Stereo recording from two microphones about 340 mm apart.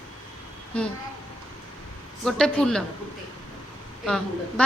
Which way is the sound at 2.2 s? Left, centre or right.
Centre.